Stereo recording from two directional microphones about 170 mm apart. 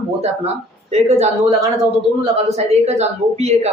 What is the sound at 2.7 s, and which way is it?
Speech, 40° right (ahead or behind).